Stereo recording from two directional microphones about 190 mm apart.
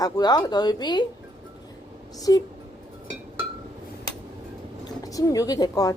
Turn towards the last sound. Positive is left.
turn(degrees=20)  # may be behind; listen again after turning